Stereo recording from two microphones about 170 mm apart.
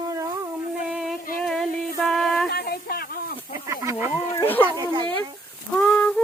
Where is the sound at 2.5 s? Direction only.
65° left (ahead or behind).